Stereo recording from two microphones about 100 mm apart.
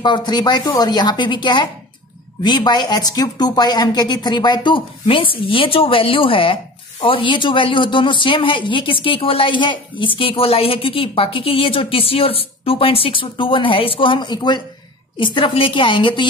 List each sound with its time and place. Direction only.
0.0 s a woman's voice: 45° left (ahead or behind)
15.1 s a woman's voice: 60° left (ahead or behind)